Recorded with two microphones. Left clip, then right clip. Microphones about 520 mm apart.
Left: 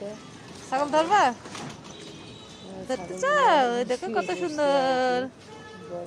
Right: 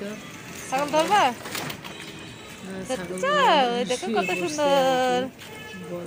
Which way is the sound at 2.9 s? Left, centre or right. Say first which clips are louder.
Even; left.